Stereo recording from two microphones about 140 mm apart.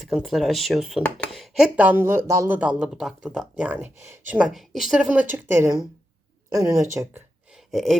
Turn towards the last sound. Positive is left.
turn(degrees=0)  # may be behind; listen again after turning